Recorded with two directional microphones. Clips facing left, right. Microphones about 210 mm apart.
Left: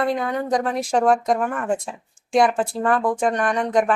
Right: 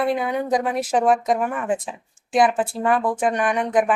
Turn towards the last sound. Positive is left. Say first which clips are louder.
# even
turn(degrees=-5)  # may be behind; listen again after turning